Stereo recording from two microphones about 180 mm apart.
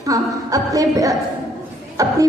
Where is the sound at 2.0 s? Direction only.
20° right (ahead or behind).